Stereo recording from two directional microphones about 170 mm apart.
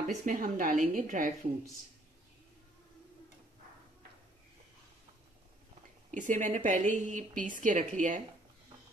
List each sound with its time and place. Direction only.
0.1 s a woman's voice: 50° right (ahead or behind)
6.1 s a woman's voice: 50° right (ahead or behind)